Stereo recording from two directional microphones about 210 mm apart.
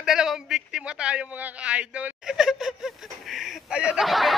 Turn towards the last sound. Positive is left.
turn(degrees=0)  # may be behind; listen again after turning